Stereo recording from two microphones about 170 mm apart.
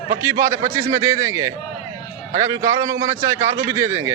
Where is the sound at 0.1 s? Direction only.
15° right (ahead or behind).